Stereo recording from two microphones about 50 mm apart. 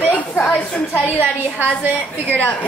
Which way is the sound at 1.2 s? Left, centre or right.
Right.